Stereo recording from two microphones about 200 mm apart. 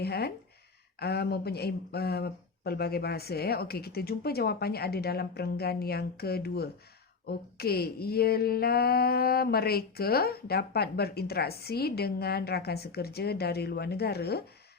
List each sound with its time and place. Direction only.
0.0 s speech: 55° left (ahead or behind)